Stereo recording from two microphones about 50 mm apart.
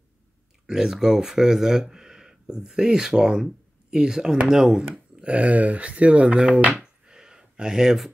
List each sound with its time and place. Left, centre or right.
0.7 s speech: centre
5.2 s speech: right
6.8 s a sound: centre